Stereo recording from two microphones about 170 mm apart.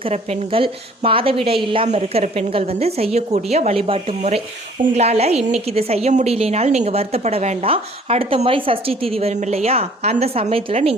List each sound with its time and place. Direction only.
0.0 s a woman's voice: 40° right (ahead or behind)
5.4 s a woman's voice: 5° right (ahead or behind)
5.6 s a woman's voice: 35° right (ahead or behind)